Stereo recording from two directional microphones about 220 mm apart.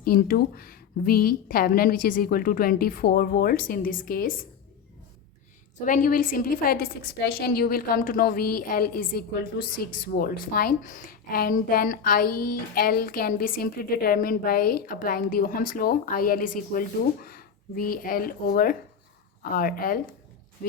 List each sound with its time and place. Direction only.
0.0 s a woman's voice: 40° left (ahead or behind)
5.8 s a woman's voice: 35° left (ahead or behind)